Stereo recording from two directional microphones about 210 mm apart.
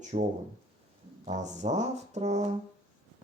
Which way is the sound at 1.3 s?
35° right (ahead or behind).